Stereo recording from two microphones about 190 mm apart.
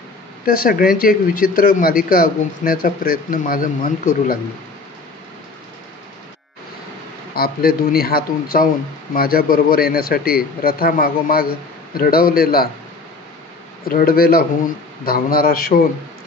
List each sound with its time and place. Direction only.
0.5 s speech: 50° left (ahead or behind)
7.3 s speech: 55° left (ahead or behind)
13.8 s speech: 50° left (ahead or behind)